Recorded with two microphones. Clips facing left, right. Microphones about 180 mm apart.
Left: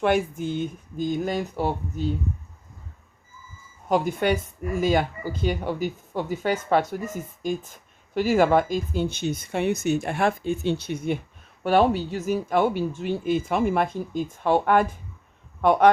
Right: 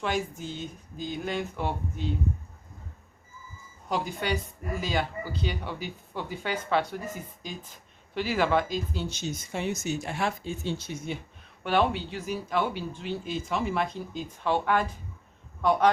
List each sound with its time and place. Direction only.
0.0 s speech: 55° left (ahead or behind); by 2.0 s 40° left (ahead or behind)
3.8 s speech: 50° left (ahead or behind)
11.6 s speech: 40° left (ahead or behind)